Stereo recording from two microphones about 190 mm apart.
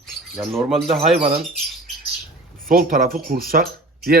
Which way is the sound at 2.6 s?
50° right (ahead or behind).